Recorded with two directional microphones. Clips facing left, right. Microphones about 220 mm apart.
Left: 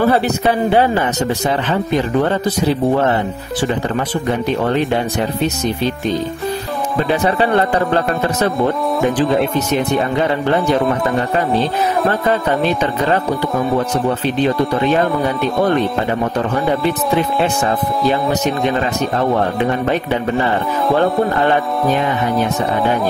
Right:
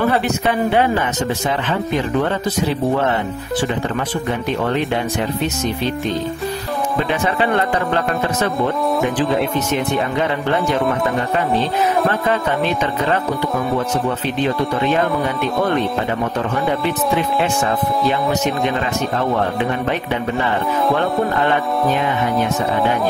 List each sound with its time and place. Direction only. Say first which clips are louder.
0.0 s speech: left 3 dB; 35° left (ahead or behind)
4.5 s speech: left 2 dB; 35° left (ahead or behind)
7.1 s speech: left 5 dB; 35° left (ahead or behind)